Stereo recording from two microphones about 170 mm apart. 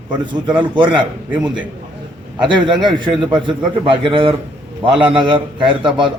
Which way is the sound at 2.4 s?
25° right (ahead or behind).